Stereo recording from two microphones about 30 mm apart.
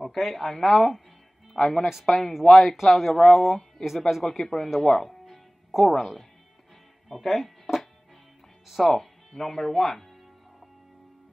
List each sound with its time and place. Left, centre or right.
0.0 s speech: centre
2.1 s speech: left
2.4 s speech: centre
4.6 s speech: centre
5.0 s music: centre
5.7 s speech: centre
7.1 s music: centre
8.6 s speech: centre
8.9 s speech: centre